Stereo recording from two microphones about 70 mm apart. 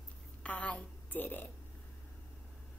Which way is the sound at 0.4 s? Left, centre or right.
Centre.